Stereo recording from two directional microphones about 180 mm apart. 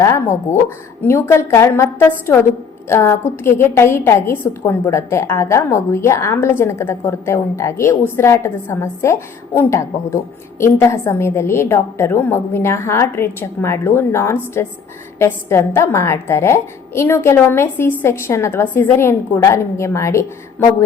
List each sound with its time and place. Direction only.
0.0 s a woman's voice: 15° left (ahead or behind)